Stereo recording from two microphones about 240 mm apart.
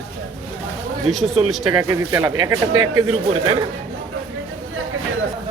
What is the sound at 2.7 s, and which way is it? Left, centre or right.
Speech, right.